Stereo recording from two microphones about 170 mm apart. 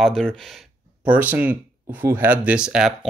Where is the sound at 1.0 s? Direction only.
10° right (ahead or behind).